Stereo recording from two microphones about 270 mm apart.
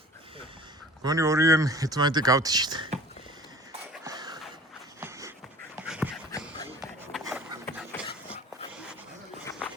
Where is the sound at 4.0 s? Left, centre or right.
Centre.